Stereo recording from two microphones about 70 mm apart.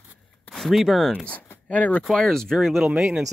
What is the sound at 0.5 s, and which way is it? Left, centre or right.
Speech, centre.